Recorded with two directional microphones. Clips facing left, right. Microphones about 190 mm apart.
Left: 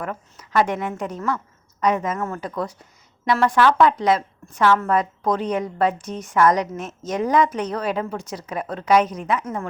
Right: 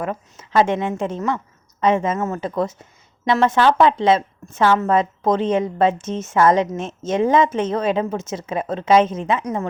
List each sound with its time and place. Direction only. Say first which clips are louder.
0.0 s a woman's voice: right 4 dB; 20° right (ahead or behind)